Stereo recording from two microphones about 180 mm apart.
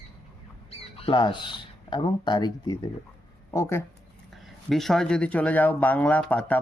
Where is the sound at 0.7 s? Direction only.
30° left (ahead or behind); by 3.8 s 15° left (ahead or behind).